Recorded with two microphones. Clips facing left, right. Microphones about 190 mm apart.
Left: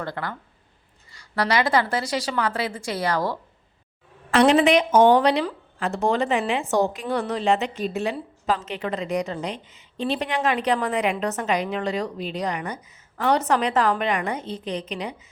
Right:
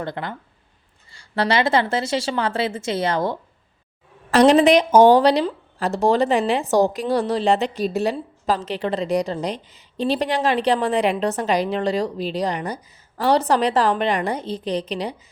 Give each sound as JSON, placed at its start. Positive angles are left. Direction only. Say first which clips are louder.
{"t": 0.0, "sound": "a woman's voice", "louder": "right 2 dB", "side_deg": -20}
{"t": 4.3, "sound": "a woman's voice", "louder": "right 3 dB", "side_deg": -40}